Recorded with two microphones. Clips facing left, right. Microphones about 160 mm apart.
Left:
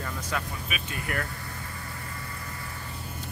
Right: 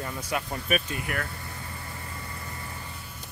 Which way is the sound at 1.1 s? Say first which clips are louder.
Left 1 dB; 5° right (ahead or behind).